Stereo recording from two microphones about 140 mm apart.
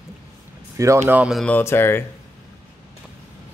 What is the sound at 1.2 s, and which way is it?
Speech, 5° right (ahead or behind).